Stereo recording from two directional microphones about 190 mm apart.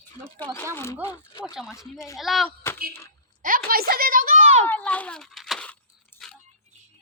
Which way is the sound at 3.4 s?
50° right (ahead or behind).